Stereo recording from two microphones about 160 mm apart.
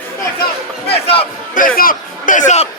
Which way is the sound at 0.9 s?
35° left (ahead or behind).